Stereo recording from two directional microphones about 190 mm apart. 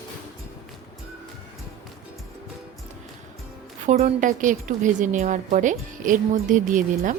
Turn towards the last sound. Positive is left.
turn(degrees=-45)  # may be behind; listen again after turning